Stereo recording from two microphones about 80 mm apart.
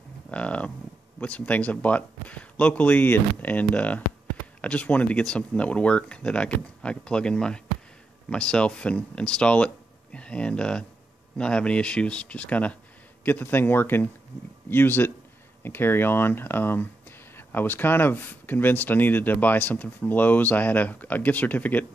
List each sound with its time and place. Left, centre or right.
0.3 s speech: centre